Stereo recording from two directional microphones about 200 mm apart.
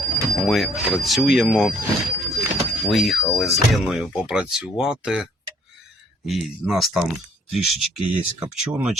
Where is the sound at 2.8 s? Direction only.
Centre (ahead or behind).